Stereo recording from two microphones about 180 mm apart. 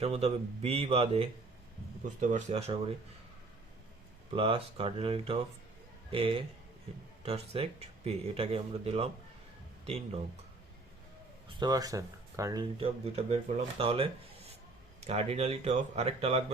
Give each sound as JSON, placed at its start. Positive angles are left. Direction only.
{"t": 0.0, "sound": "speech", "side_deg": -35}
{"t": 4.3, "sound": "speech", "side_deg": -30}
{"t": 11.4, "sound": "speech", "side_deg": -20}
{"t": 12.8, "sound": "speech", "side_deg": -35}